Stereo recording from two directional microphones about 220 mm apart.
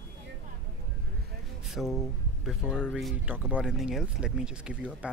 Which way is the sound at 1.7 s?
Centre (ahead or behind).